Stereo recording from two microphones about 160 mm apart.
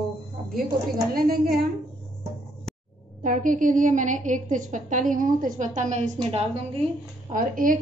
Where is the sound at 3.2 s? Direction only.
55° right (ahead or behind); by 6.4 s 40° right (ahead or behind).